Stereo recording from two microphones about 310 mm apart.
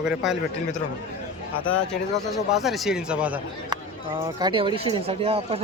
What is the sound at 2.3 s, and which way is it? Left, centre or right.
Speech, centre.